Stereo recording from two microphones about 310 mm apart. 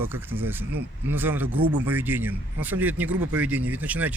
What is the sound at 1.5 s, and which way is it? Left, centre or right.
Speech, right.